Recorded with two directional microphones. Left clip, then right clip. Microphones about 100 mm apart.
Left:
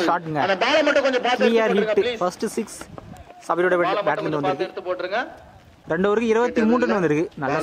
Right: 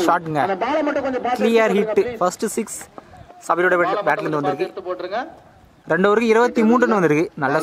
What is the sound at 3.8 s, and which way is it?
A man's voice, 5° left (ahead or behind).